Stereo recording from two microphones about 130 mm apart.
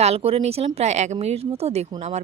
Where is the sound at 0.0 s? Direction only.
50° right (ahead or behind).